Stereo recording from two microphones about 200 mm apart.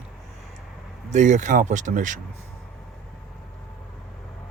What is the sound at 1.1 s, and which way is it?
Speech, 40° right (ahead or behind).